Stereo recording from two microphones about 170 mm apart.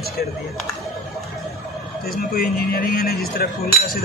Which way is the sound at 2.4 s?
60° left (ahead or behind).